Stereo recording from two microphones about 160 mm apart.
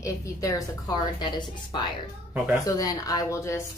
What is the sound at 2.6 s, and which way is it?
Speech, 20° left (ahead or behind).